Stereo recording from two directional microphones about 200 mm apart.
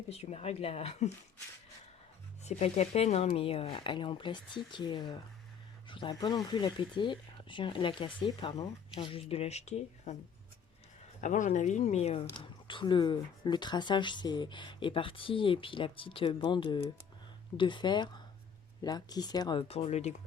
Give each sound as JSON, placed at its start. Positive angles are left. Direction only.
{"t": 0.1, "sound": "speech", "side_deg": 30}
{"t": 2.4, "sound": "speech", "side_deg": 35}
{"t": 11.2, "sound": "speech", "side_deg": 40}